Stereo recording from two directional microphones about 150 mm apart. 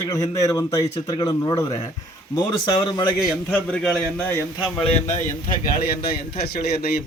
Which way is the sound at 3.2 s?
5° left (ahead or behind).